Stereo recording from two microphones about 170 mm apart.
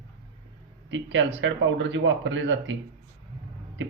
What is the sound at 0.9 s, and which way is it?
Speech, 90° right.